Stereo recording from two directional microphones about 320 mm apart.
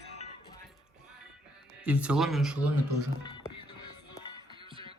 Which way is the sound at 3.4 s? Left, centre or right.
Left.